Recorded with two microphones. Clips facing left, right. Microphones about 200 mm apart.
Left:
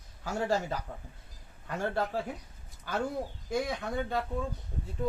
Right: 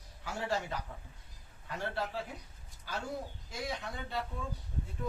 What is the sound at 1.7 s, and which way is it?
Speech, 45° left (ahead or behind).